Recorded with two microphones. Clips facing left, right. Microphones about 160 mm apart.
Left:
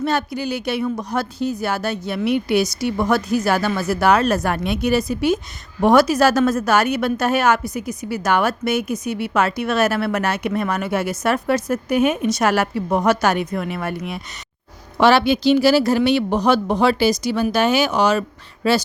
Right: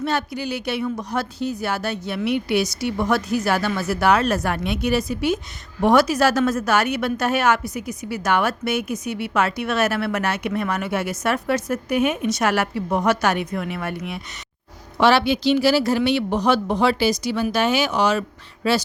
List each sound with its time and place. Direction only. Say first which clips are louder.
0.0 s a woman's voice: left 3 dB; 45° left (ahead or behind)